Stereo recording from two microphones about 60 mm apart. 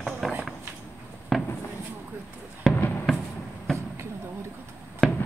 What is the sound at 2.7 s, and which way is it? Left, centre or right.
Fireworks, centre.